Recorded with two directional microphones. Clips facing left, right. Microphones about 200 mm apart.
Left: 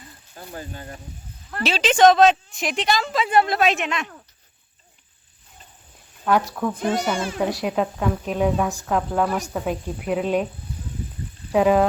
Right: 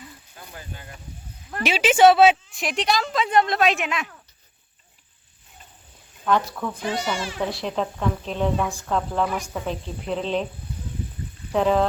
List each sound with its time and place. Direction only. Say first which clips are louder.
0.3 s speech: left 7 dB; 40° left (ahead or behind)
1.5 s speech: right 1 dB; 15° right (ahead or behind)
6.2 s speech: left 2 dB; 10° left (ahead or behind)
7.0 s speech: left 3 dB; 50° left (ahead or behind)
7.3 s speech: left 4 dB; 10° left (ahead or behind)
11.5 s speech: left 3 dB; 10° left (ahead or behind)